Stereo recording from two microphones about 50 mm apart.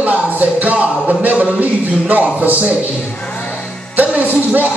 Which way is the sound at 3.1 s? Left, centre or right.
Left.